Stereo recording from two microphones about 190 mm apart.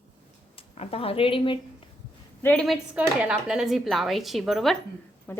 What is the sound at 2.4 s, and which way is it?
A woman's voice, 5° left (ahead or behind).